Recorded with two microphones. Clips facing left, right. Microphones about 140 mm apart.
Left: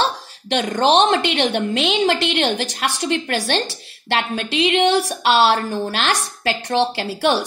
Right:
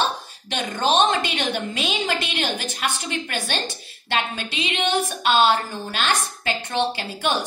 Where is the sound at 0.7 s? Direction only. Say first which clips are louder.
Left 4 dB; 70° left (ahead or behind).